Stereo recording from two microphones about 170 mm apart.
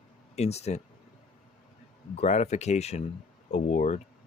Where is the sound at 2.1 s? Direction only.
40° left (ahead or behind).